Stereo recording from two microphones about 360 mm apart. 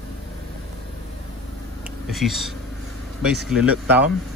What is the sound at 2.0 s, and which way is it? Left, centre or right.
Speech, centre.